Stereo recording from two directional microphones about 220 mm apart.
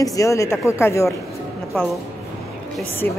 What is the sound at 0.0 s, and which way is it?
Speech, 15° left (ahead or behind).